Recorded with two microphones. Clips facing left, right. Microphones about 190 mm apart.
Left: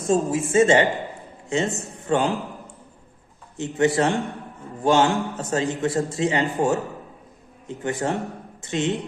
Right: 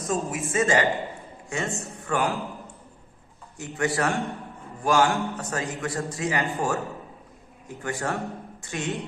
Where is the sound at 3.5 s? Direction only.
25° left (ahead or behind).